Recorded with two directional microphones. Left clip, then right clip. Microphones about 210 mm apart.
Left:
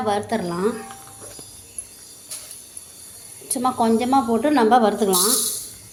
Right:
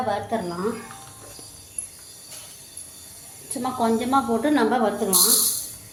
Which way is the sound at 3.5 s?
30° left (ahead or behind).